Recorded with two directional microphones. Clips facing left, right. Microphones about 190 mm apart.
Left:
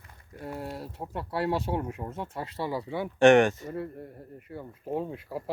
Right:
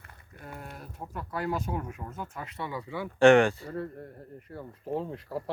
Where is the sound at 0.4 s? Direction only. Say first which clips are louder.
Left 7 dB; 30° left (ahead or behind).